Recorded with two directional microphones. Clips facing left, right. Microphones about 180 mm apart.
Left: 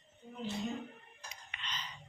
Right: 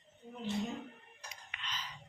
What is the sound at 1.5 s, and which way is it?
Whispering, centre (ahead or behind).